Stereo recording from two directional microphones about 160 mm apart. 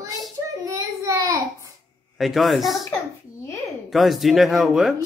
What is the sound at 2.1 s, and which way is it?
Speech, centre (ahead or behind).